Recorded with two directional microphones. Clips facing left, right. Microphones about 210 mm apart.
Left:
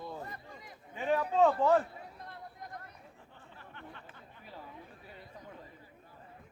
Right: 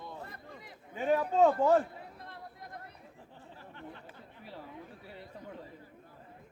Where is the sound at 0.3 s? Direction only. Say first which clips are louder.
Even; 60° right (ahead or behind).